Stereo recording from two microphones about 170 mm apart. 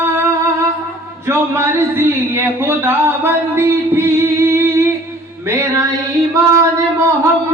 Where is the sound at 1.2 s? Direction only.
15° right (ahead or behind).